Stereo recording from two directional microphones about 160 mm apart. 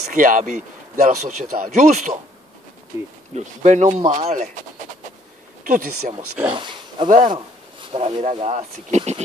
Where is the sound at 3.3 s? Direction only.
45° right (ahead or behind).